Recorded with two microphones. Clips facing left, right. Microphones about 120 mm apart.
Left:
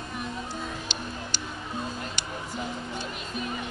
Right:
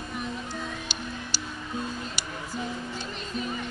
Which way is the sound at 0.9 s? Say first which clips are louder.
Left 1 dB; 10° right (ahead or behind).